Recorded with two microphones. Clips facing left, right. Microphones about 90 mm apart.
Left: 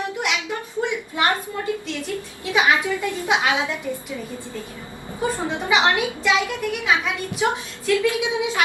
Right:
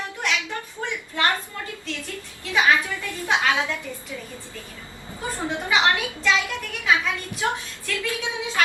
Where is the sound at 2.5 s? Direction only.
15° left (ahead or behind).